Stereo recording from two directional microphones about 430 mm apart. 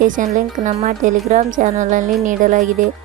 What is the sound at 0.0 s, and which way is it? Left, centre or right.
Speech, centre.